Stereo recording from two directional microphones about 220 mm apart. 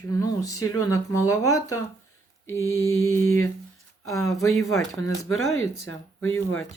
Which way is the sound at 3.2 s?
70° left (ahead or behind).